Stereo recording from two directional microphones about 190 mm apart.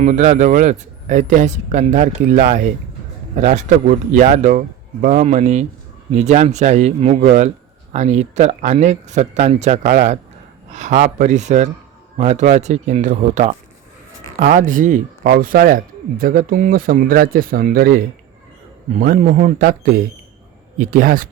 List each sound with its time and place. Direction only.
0.0 s speech: 40° right (ahead or behind)